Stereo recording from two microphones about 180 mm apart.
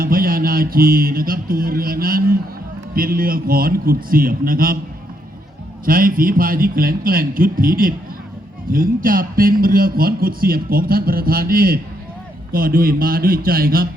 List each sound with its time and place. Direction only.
0.0 s a sound: 55° right (ahead or behind)
2.9 s a man's voice: 55° right (ahead or behind)
5.8 s a man's voice: 50° right (ahead or behind)